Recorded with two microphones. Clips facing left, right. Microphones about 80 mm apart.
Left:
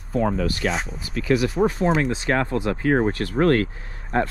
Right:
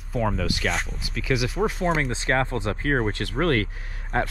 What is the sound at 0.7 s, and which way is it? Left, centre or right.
Speech, centre.